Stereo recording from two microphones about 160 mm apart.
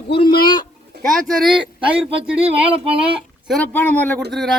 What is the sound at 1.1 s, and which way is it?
Speech, centre (ahead or behind).